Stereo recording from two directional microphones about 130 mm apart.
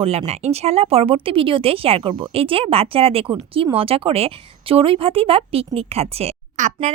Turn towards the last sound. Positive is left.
turn(degrees=-70)  # may be behind; listen again after turning